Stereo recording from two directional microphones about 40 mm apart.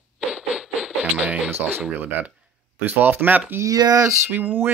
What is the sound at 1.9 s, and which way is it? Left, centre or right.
Speech, right.